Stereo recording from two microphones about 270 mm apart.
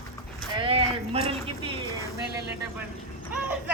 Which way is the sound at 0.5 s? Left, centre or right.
Centre.